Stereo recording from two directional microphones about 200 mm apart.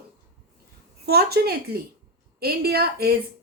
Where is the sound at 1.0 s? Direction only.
50° right (ahead or behind).